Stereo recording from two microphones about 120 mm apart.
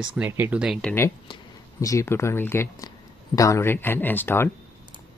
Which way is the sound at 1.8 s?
25° left (ahead or behind).